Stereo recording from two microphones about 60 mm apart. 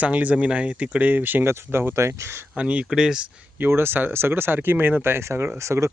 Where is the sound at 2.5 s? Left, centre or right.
Centre.